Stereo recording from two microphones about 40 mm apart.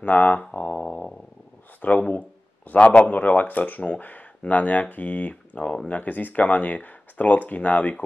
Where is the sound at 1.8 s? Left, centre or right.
Left.